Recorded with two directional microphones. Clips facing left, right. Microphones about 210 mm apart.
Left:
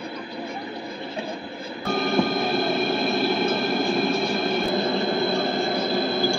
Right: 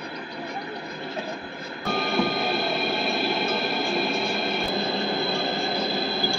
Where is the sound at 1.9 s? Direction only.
50° left (ahead or behind).